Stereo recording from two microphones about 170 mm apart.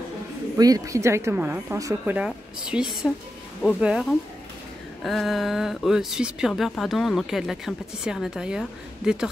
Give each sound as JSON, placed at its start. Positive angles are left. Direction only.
{"t": 0.6, "sound": "speech", "side_deg": -20}